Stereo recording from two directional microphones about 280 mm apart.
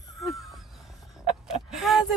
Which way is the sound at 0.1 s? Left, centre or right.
Centre.